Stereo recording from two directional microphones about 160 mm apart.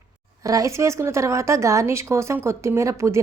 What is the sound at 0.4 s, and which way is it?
A woman's voice, 20° right (ahead or behind).